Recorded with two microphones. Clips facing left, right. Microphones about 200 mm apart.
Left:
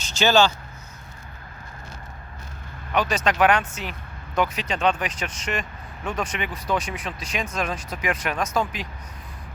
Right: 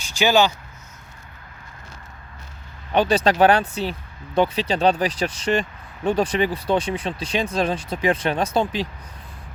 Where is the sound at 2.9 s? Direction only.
30° right (ahead or behind).